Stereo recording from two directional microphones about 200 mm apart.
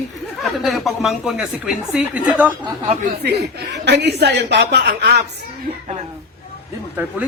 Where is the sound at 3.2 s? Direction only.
55° right (ahead or behind).